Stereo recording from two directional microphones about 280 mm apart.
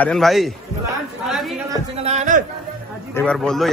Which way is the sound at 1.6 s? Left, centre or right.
Right.